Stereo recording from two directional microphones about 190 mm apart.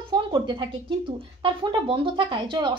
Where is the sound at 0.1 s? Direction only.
25° right (ahead or behind).